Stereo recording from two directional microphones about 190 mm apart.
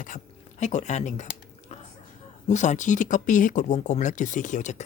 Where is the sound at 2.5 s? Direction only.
40° left (ahead or behind).